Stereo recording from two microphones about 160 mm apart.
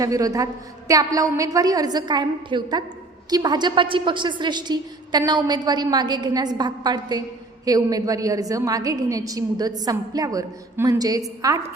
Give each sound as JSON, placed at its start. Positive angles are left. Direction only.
{"t": 0.0, "sound": "a woman's voice", "side_deg": -20}